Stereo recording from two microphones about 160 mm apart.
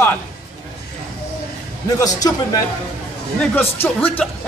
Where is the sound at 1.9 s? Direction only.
20° left (ahead or behind).